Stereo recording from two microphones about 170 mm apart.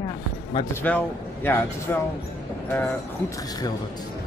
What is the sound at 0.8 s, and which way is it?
Speech, 10° left (ahead or behind).